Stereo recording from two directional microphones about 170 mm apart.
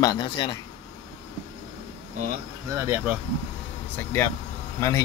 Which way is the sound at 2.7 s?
15° right (ahead or behind).